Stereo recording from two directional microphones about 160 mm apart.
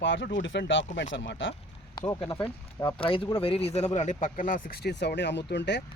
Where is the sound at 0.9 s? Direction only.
50° left (ahead or behind).